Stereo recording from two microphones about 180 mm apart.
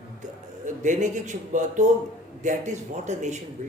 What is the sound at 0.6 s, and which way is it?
Speech, 45° right (ahead or behind).